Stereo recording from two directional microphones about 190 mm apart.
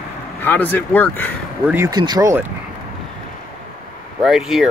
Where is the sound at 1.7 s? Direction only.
15° right (ahead or behind).